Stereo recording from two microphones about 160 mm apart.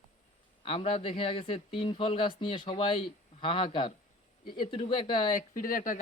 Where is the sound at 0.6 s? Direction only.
35° left (ahead or behind).